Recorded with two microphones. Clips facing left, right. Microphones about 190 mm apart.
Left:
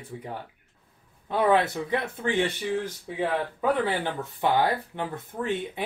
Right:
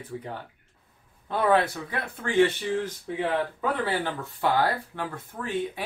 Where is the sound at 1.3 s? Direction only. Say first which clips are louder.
Left 1 dB; 15° left (ahead or behind).